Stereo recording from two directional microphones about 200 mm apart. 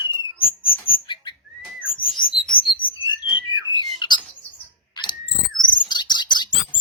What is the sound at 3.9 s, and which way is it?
Bird, 20° left (ahead or behind).